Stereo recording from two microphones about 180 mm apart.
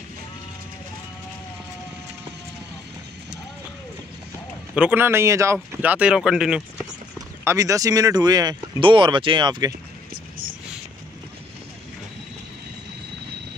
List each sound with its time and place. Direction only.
4.7 s speech: 10° right (ahead or behind)
7.2 s speech: 20° right (ahead or behind)